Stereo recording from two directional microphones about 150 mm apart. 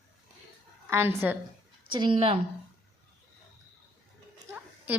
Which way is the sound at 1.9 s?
35° right (ahead or behind).